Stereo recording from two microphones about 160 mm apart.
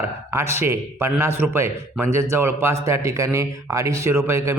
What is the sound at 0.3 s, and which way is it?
A man's voice, 15° right (ahead or behind).